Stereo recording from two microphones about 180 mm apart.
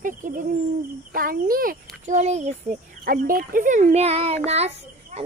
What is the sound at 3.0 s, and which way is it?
Speech, 55° right (ahead or behind).